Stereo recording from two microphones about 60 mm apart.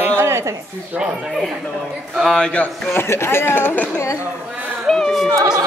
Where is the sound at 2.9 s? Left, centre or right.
Left.